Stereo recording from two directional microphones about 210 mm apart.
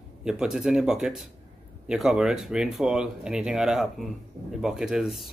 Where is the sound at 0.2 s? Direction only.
5° right (ahead or behind).